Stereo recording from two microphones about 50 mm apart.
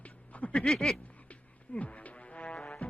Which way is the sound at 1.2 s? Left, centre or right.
Left.